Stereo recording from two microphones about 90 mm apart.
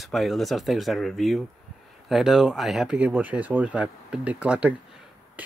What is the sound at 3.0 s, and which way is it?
Speech, 20° right (ahead or behind).